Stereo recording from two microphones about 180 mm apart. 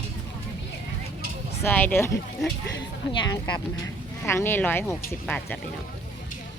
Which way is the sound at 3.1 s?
25° left (ahead or behind).